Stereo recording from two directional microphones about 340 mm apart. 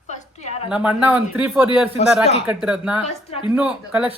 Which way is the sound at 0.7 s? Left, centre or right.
Centre.